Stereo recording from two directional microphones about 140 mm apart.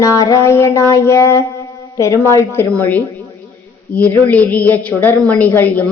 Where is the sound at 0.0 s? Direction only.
25° left (ahead or behind).